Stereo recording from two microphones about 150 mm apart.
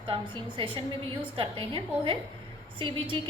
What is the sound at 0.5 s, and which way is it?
A woman's voice, 35° right (ahead or behind).